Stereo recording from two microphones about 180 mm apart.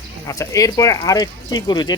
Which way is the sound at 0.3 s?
20° left (ahead or behind).